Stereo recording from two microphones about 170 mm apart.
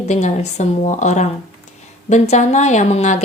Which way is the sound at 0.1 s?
45° left (ahead or behind).